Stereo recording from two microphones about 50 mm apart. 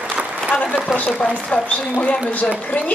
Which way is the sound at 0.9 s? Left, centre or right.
Centre.